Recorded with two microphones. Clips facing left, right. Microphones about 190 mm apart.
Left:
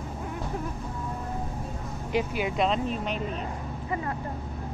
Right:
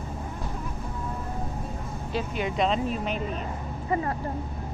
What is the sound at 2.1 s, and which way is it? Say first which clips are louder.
Speech: left 2 dB; 5° left (ahead or behind).